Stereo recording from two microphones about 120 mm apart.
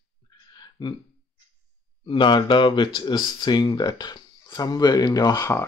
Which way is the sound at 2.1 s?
40° left (ahead or behind).